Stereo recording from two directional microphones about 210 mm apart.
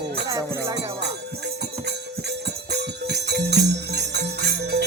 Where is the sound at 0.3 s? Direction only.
15° right (ahead or behind).